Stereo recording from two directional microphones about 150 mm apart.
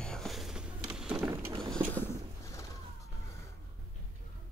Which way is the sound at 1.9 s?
15° left (ahead or behind).